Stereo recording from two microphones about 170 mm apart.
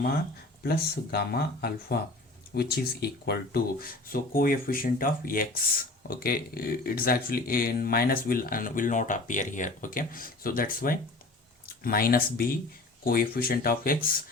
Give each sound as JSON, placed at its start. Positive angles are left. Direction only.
{"t": 0.6, "sound": "speech", "side_deg": 65}